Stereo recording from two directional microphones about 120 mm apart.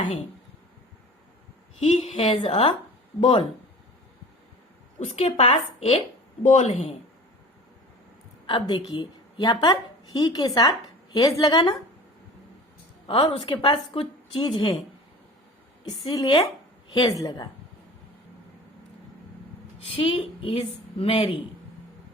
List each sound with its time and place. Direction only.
1.8 s a woman's voice: 60° left (ahead or behind)
4.9 s a woman's voice: 60° left (ahead or behind)
6.4 s a woman's voice: 65° left (ahead or behind)
8.4 s a woman's voice: 40° left (ahead or behind)
13.1 s a woman's voice: 45° left (ahead or behind)
16.0 s a woman's voice: 40° left (ahead or behind)
17.1 s a woman's voice: 30° left (ahead or behind)
19.9 s a woman's voice: 50° left (ahead or behind)